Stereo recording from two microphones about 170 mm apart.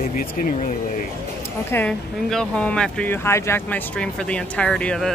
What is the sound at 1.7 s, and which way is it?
Speech, 10° left (ahead or behind).